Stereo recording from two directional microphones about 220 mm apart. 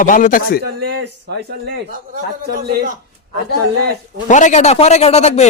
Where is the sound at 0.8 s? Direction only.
90° right.